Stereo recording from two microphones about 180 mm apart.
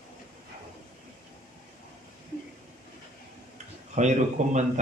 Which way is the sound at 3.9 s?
40° right (ahead or behind).